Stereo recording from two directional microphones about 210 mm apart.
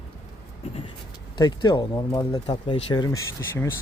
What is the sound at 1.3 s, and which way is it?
Speech, 20° left (ahead or behind).